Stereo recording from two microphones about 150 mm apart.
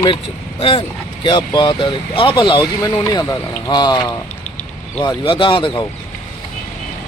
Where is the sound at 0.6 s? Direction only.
35° left (ahead or behind).